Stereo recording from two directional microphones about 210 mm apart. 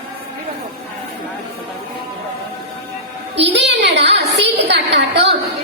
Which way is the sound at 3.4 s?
55° right (ahead or behind).